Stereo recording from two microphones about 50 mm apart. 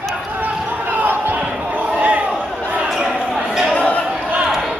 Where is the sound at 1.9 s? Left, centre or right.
Right.